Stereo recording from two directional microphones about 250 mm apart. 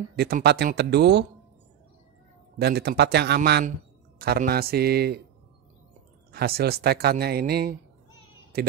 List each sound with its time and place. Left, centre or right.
0.1 s speech: right
2.6 s speech: right
6.3 s speech: right